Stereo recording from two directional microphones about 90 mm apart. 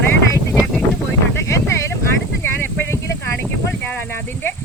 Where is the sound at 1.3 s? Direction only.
35° left (ahead or behind).